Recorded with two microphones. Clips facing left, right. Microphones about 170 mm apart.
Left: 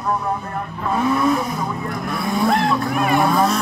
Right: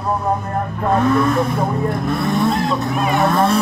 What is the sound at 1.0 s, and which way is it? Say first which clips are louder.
Speech: right 1 dB; 10° left (ahead or behind).